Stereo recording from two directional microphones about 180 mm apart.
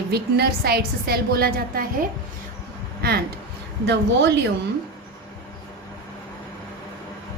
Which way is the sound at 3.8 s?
75° right (ahead or behind).